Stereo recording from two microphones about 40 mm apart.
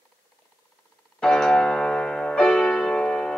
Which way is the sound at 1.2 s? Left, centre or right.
Centre.